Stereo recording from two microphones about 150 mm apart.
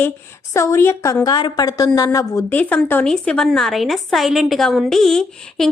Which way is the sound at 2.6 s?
10° left (ahead or behind).